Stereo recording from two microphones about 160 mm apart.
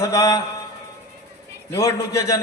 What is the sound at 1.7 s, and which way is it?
Speech, 20° left (ahead or behind).